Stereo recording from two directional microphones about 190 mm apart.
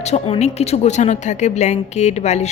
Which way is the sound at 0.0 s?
35° left (ahead or behind).